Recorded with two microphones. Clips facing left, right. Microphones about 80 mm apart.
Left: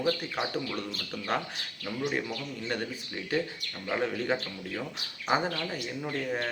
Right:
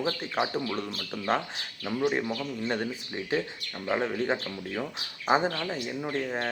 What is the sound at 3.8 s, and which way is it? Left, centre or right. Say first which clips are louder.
Speech: right 2 dB; right.